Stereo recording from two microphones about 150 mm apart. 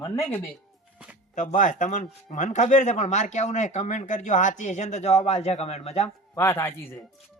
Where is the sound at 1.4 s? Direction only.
55° left (ahead or behind).